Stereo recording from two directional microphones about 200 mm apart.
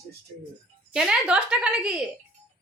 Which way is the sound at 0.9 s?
5° right (ahead or behind).